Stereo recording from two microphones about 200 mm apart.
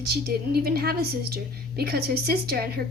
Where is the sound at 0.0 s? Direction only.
50° right (ahead or behind).